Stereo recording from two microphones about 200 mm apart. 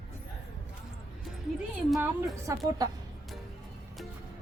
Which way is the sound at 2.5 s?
15° right (ahead or behind).